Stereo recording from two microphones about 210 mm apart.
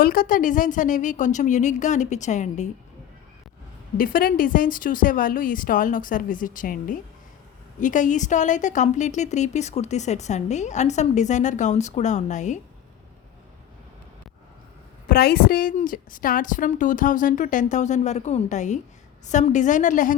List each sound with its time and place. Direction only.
0.0 s a woman's voice: 45° left (ahead or behind)
3.9 s a woman's voice: 45° left (ahead or behind)
15.0 s a woman's voice: 45° left (ahead or behind)